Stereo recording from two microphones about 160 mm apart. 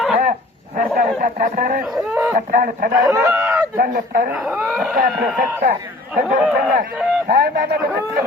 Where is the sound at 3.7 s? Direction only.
65° right (ahead or behind).